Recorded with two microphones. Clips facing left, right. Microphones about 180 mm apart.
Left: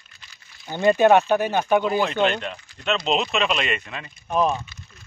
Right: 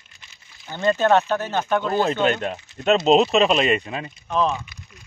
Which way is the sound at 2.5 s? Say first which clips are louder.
Right 6 dB; 25° right (ahead or behind).